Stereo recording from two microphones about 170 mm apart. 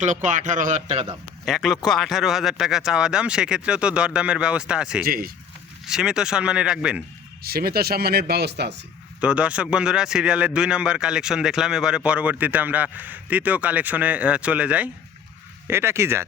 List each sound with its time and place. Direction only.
0.0 s a man's voice: 45° right (ahead or behind)
1.5 s speech: centre (ahead or behind)
5.0 s speech: 60° right (ahead or behind)
5.8 s speech: 5° right (ahead or behind)
7.4 s speech: 65° right (ahead or behind)
9.2 s speech: 5° right (ahead or behind)